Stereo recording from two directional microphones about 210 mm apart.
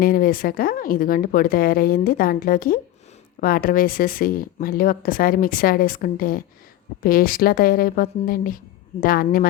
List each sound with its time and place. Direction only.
0.0 s speech: 45° left (ahead or behind)